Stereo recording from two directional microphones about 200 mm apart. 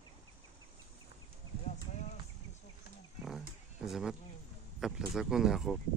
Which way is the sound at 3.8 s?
Centre (ahead or behind).